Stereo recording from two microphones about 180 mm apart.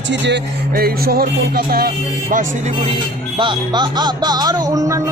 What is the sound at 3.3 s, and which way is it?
Music, 25° right (ahead or behind).